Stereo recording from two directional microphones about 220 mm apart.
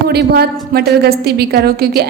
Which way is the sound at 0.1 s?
45° right (ahead or behind).